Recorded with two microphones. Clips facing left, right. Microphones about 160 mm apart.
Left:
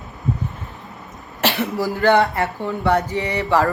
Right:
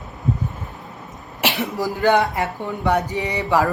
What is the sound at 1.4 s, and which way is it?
Speech, 15° right (ahead or behind).